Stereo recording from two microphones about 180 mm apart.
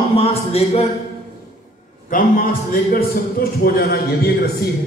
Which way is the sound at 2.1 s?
50° left (ahead or behind).